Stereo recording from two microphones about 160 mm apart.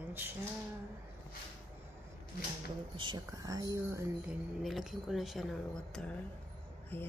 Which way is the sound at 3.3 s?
20° right (ahead or behind).